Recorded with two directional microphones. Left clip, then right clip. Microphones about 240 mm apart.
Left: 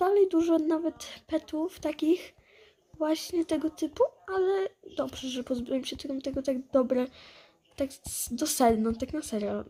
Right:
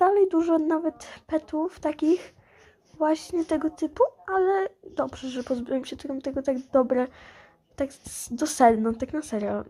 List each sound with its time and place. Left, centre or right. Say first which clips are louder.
0.0 s speech: right 4 dB; centre